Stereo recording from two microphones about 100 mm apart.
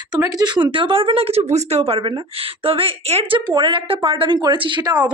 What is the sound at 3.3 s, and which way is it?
A woman's voice, 50° right (ahead or behind).